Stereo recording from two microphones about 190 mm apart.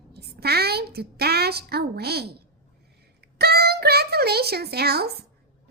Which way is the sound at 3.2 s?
55° right (ahead or behind).